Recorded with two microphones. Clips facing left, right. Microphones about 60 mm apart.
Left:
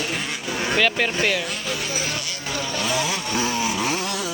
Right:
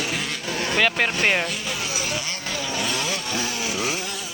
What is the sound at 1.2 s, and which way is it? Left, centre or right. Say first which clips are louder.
Speech: right 2 dB; right.